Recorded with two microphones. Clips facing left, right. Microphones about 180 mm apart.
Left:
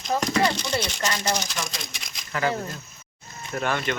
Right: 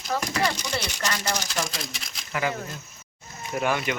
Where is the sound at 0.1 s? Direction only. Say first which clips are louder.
Left 3 dB; 25° left (ahead or behind).